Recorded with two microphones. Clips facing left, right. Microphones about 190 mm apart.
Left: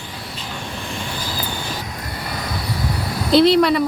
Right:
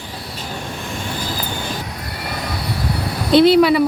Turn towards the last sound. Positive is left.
turn(degrees=-5)  # may be behind; listen again after turning